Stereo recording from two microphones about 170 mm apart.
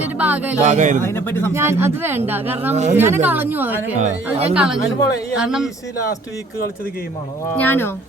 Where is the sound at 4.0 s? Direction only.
45° right (ahead or behind).